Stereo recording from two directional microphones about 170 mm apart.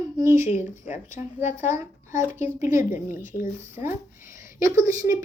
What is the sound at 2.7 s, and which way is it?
Speech, 15° right (ahead or behind).